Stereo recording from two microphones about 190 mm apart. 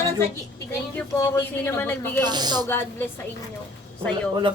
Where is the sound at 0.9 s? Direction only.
10° left (ahead or behind).